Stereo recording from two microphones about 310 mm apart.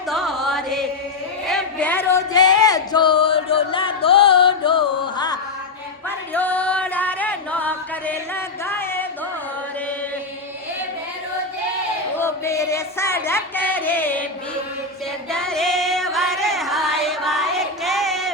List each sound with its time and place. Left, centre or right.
0.1 s carnatic music: centre
1.5 s music: centre
6.3 s singing: centre
8.6 s a sound: centre
12.1 s music: centre
15.3 s female singing: centre